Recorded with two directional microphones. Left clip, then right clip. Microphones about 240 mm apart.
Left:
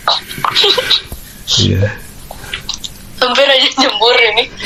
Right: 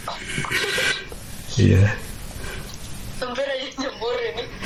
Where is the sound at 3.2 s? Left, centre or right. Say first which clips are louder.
Left 17 dB; left.